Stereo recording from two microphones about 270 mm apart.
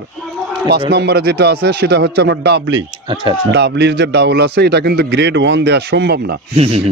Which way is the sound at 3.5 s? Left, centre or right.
Right.